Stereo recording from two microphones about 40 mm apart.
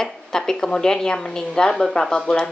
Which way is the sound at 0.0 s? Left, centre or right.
Centre.